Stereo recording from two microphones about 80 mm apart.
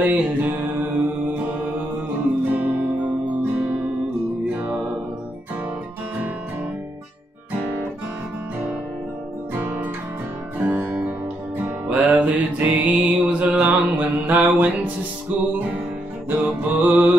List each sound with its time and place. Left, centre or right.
0.0 s music: right
9.6 s music: right
10.6 s guitar: right
11.1 s music: right
16.3 s music: centre